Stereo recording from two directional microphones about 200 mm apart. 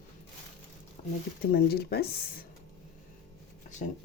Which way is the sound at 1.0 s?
30° left (ahead or behind).